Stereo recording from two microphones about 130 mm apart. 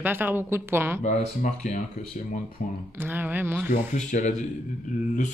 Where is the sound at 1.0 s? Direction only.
70° left (ahead or behind).